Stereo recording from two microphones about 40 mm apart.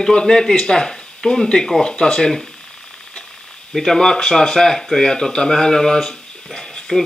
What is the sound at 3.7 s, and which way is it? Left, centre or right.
Speech, centre.